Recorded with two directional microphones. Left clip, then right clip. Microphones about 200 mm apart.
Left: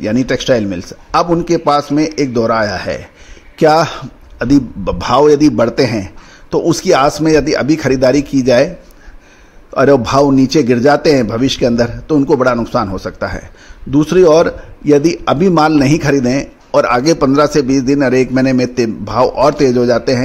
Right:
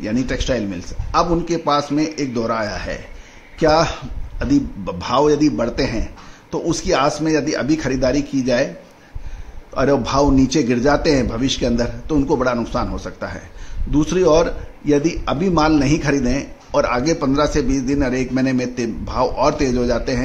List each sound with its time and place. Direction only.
0.0 s a man's voice: 35° left (ahead or behind)
9.8 s a man's voice: 35° left (ahead or behind)